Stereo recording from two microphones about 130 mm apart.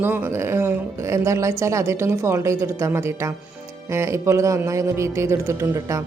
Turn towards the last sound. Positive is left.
turn(degrees=-25)  # may be behind; listen again after turning